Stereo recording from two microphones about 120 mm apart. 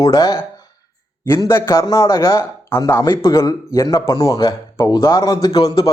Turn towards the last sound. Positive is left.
turn(degrees=35)  # may be behind; listen again after turning